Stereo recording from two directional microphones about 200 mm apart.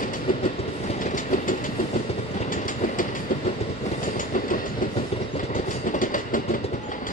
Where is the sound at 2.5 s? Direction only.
40° left (ahead or behind).